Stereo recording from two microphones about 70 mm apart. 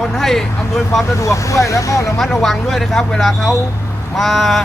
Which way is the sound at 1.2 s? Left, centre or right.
Left.